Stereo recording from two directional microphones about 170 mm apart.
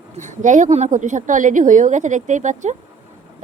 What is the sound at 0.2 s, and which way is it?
A woman's voice, 45° right (ahead or behind).